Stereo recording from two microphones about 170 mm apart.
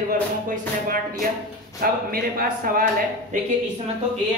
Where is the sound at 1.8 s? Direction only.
55° right (ahead or behind).